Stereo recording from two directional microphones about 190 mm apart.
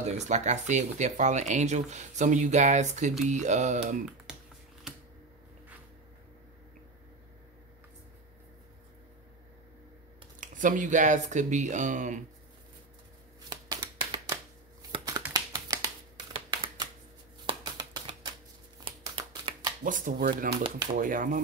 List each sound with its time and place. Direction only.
0.0 s speech: 35° right (ahead or behind)
10.4 s speech: 45° right (ahead or behind)
13.5 s a sound: 20° right (ahead or behind)
15.5 s finger snapping: 20° right (ahead or behind)
16.4 s typewriter: 20° right (ahead or behind)
17.5 s a sound: 25° right (ahead or behind)
18.9 s shuffling cards: 25° right (ahead or behind)
19.8 s speech: 45° right (ahead or behind)